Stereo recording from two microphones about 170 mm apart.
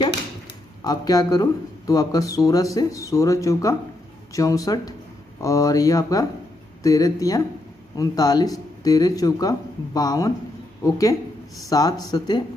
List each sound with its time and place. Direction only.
0.8 s speech: 20° left (ahead or behind)